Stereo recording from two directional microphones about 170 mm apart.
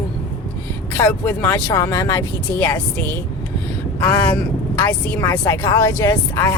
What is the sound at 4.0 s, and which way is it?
Speech, 15° left (ahead or behind).